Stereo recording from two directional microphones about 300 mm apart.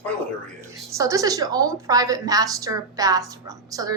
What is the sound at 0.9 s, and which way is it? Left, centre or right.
A woman's voice, centre.